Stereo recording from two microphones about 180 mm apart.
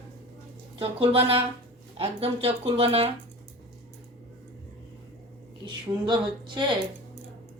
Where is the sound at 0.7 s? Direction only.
30° right (ahead or behind).